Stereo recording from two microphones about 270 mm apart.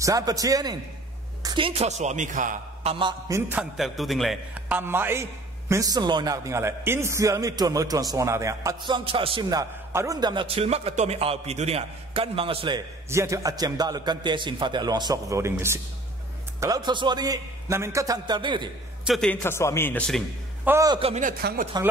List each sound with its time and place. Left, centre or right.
0.0 s a man's voice: centre
19.0 s a man's voice: centre
20.7 s a man's voice: centre; by 21.6 s right